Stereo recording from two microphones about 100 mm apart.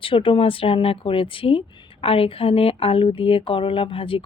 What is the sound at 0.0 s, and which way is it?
Speech, 60° left (ahead or behind).